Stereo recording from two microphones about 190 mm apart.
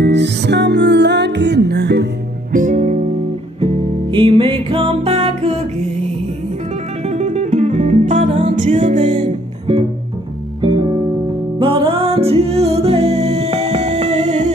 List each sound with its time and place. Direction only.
0.0 s music: 65° right (ahead or behind)
2.5 s music: 40° right (ahead or behind)
7.1 s music: 35° right (ahead or behind)
8.9 s music: 25° right (ahead or behind)
11.6 s music: 30° right (ahead or behind)